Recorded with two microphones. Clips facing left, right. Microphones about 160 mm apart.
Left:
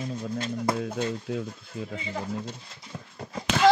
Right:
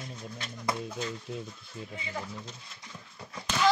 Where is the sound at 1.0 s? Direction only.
75° left (ahead or behind).